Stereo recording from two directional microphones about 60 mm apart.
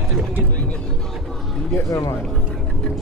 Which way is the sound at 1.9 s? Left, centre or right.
Left.